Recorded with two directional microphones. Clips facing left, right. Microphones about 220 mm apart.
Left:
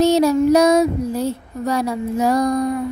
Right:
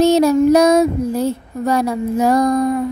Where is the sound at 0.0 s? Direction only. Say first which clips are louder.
Right 2 dB; 50° right (ahead or behind).